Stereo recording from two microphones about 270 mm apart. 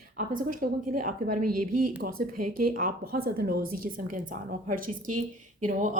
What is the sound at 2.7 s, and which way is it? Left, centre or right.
A woman's voice, right.